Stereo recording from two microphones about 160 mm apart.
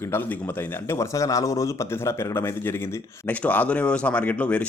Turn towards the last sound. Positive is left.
turn(degrees=10)  # may be behind; listen again after turning